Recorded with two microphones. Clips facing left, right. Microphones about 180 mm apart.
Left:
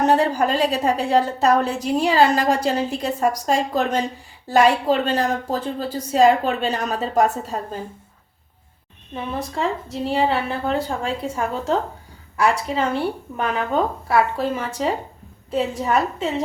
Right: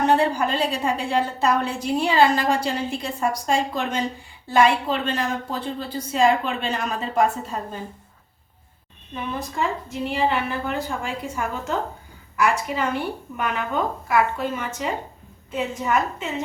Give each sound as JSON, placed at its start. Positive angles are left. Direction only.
{"t": 0.0, "sound": "a woman's voice", "side_deg": 40}
{"t": 9.1, "sound": "a woman's voice", "side_deg": 30}